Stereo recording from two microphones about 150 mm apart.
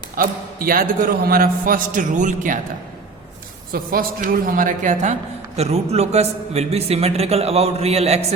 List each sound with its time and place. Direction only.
0.2 s a man's voice: 70° right (ahead or behind)
3.7 s a woman's voice: 75° right (ahead or behind); by 5.1 s 55° right (ahead or behind)
5.5 s a man's voice: 45° right (ahead or behind)